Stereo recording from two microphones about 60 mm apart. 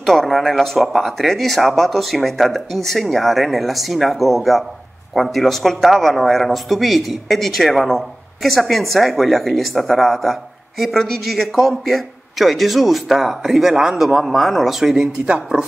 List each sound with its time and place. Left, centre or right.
0.0 s speech: centre
15.2 s speech: centre